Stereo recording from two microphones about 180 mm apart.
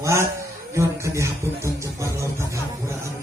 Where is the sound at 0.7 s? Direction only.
15° right (ahead or behind).